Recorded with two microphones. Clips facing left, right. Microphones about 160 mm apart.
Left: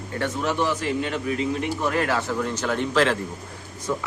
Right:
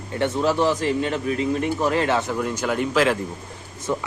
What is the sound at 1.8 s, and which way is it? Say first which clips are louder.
A man's voice: right 2 dB; 25° right (ahead or behind).